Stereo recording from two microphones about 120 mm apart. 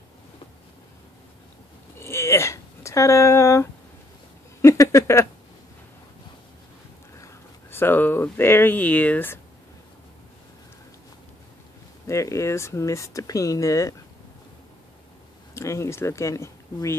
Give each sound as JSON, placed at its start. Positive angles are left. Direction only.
{"t": 2.0, "sound": "a sound", "side_deg": 20}
{"t": 4.6, "sound": "speech", "side_deg": 25}
{"t": 7.2, "sound": "speech", "side_deg": 20}
{"t": 12.1, "sound": "speech", "side_deg": 25}
{"t": 15.5, "sound": "speech", "side_deg": 25}